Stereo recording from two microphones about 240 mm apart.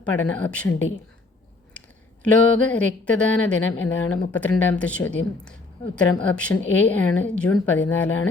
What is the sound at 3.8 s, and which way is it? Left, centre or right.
Speech, left.